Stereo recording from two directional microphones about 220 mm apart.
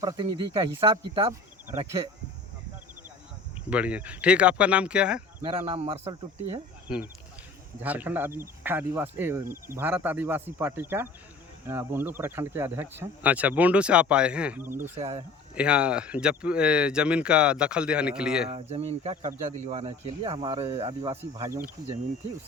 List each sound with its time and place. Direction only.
0.0 s speech: 20° right (ahead or behind)
3.7 s speech: 5° right (ahead or behind)
5.5 s speech: 25° right (ahead or behind)
6.8 s speech: 5° right (ahead or behind)
14.9 s speech: 30° right (ahead or behind)
15.5 s speech: 5° right (ahead or behind)
18.5 s speech: 30° right (ahead or behind)
21.2 s speech: 10° right (ahead or behind)